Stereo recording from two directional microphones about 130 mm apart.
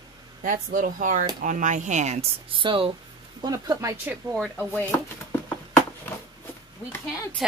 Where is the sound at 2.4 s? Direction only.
40° right (ahead or behind).